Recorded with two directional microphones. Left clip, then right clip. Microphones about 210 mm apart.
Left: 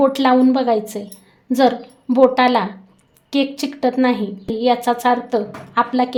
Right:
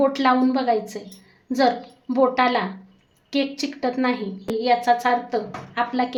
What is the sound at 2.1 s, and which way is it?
A woman's voice, 35° left (ahead or behind).